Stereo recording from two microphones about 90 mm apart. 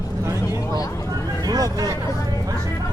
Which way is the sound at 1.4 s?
45° right (ahead or behind).